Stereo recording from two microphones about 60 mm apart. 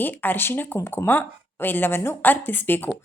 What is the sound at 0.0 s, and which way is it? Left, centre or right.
Speech, left.